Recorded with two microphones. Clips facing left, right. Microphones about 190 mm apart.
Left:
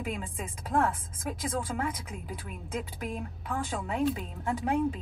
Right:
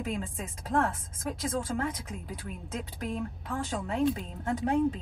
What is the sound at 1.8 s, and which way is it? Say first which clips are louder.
Speech: right 1 dB; 40° right (ahead or behind).